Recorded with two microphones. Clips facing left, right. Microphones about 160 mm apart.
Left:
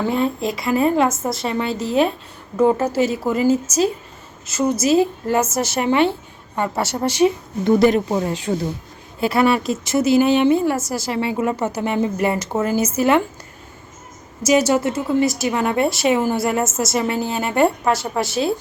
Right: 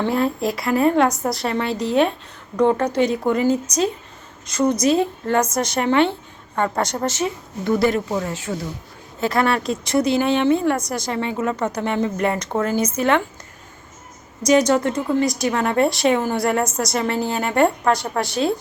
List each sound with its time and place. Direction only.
0.0 s a woman's voice: centre (ahead or behind); by 8.5 s 20° left (ahead or behind)
9.2 s speech: 10° left (ahead or behind)
14.4 s a woman's voice: 10° left (ahead or behind)